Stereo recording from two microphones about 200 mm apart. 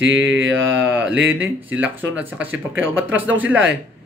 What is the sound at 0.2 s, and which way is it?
Mantra, 75° right (ahead or behind).